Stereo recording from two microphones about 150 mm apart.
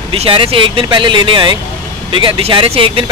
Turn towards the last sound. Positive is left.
turn(degrees=-35)  # may be behind; listen again after turning